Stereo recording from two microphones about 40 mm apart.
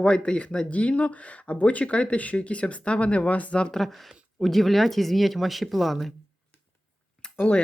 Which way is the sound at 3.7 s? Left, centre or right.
Centre.